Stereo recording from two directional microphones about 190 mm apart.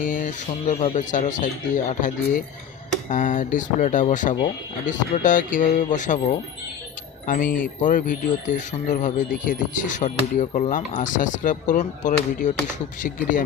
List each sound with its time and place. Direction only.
0.0 s speech: 45° left (ahead or behind)